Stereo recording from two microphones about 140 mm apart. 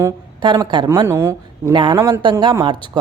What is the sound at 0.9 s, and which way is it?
Speech, 20° right (ahead or behind).